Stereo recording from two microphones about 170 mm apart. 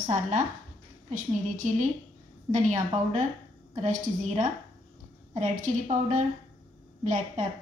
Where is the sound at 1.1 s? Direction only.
45° right (ahead or behind).